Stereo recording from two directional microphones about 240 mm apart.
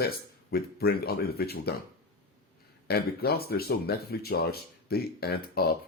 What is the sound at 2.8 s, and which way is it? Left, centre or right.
Speech, left.